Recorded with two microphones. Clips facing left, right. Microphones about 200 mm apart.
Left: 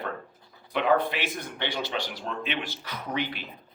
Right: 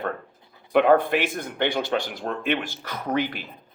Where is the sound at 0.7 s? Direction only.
55° right (ahead or behind).